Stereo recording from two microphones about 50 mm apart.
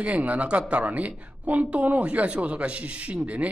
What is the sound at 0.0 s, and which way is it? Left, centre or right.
A woman's voice, right.